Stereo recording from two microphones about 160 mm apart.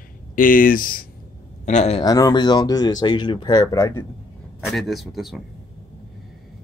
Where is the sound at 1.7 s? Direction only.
45° left (ahead or behind).